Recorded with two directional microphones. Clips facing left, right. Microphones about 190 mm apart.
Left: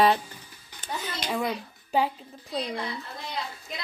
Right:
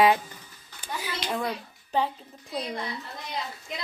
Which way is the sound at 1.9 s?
10° left (ahead or behind).